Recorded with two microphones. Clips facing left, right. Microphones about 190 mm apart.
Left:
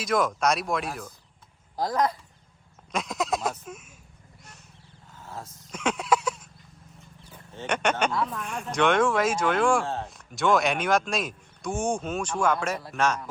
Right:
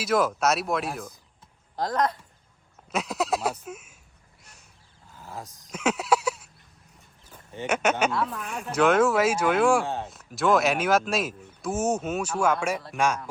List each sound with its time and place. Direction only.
0.0 s speech: 5° right (ahead or behind)
5.4 s speech: 5° right (ahead or behind)
7.5 s speech: 10° right (ahead or behind)